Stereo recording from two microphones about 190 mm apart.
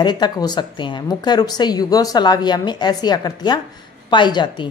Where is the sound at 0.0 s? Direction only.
20° left (ahead or behind).